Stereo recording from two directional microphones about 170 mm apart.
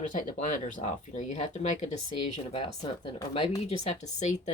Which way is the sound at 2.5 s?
25° left (ahead or behind).